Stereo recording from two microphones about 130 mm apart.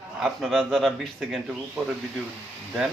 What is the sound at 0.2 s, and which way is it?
Speech, centre (ahead or behind).